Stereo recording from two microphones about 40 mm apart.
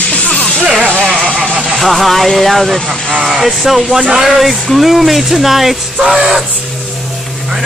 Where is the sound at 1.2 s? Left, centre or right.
Centre.